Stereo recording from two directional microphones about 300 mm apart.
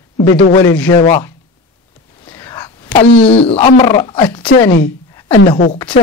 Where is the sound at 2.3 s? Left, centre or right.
Centre.